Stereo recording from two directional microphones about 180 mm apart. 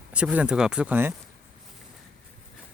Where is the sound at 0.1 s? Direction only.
5° right (ahead or behind).